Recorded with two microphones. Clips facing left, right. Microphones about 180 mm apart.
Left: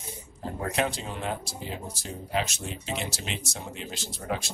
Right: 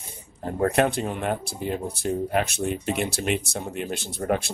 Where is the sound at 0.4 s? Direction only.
55° right (ahead or behind).